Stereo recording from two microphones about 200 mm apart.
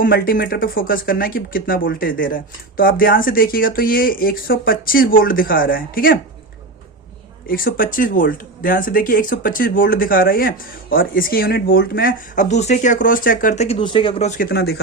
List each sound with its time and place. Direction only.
0.0 s speech: 45° left (ahead or behind)
7.4 s speech: 45° left (ahead or behind); by 14.3 s 30° left (ahead or behind)
14.3 s speech: 50° left (ahead or behind)